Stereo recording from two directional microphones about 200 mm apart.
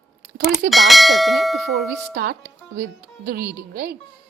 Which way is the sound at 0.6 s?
Centre (ahead or behind).